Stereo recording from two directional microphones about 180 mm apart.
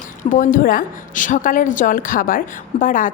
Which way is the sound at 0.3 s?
45° left (ahead or behind).